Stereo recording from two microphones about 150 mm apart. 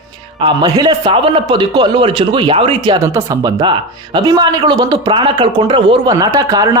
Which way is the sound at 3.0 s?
20° right (ahead or behind).